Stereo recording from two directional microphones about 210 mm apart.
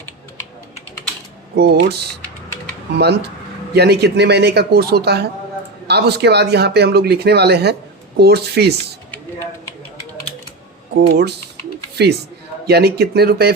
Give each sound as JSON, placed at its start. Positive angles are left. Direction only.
{"t": 1.5, "sound": "speech", "side_deg": -50}
{"t": 3.0, "sound": "speech", "side_deg": -50}
{"t": 11.1, "sound": "speech", "side_deg": -50}